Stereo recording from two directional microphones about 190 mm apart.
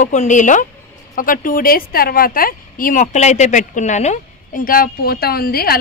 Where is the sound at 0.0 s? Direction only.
40° left (ahead or behind).